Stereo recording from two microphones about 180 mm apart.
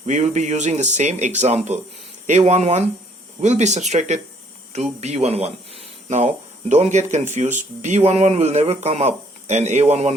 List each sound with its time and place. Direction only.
0.0 s speech: 40° right (ahead or behind)